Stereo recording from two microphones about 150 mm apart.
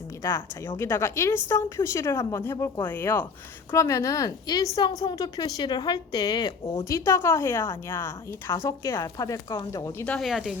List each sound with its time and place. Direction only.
0.2 s a woman's voice: 15° left (ahead or behind)
10.1 s speech: centre (ahead or behind)